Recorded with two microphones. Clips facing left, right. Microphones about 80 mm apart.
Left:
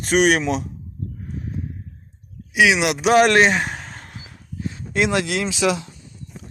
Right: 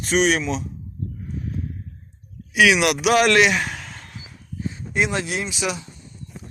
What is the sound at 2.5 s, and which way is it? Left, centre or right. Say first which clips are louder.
Speech: even; centre.